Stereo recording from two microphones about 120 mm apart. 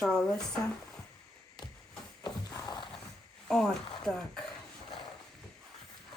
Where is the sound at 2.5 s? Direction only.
35° left (ahead or behind).